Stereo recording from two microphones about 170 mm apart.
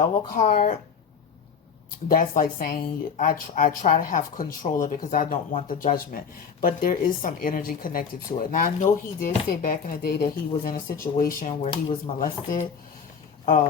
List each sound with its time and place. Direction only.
0.0 s speech: 50° left (ahead or behind)
2.0 s speech: 55° left (ahead or behind)